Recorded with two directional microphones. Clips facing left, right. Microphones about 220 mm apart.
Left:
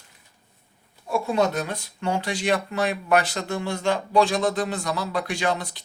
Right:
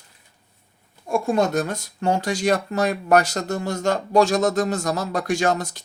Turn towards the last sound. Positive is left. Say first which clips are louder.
# right 4 dB
turn(degrees=-45)  # may be behind; listen again after turning